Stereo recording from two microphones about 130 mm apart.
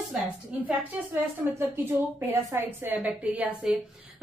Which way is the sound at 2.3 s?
20° right (ahead or behind).